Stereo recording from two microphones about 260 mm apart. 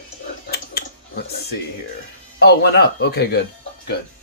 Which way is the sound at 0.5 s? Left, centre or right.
Left.